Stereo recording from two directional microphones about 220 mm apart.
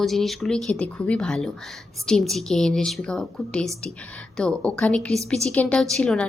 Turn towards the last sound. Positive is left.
turn(degrees=5)  # may be behind; listen again after turning